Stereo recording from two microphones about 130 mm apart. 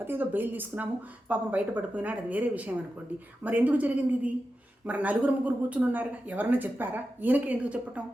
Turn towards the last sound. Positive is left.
turn(degrees=-10)  # may be behind; listen again after turning